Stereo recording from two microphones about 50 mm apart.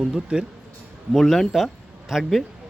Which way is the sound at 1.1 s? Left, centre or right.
Centre.